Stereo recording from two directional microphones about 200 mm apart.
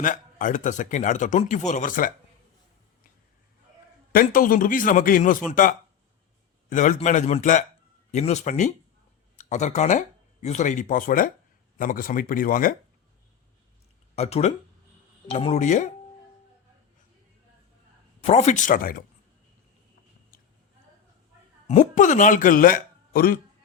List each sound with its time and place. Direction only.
0.0 s speech: 40° left (ahead or behind)
4.1 s a man's voice: 45° left (ahead or behind)
14.2 s speech: 30° left (ahead or behind)
18.2 s speech: 30° left (ahead or behind)
21.7 s speech: 40° left (ahead or behind)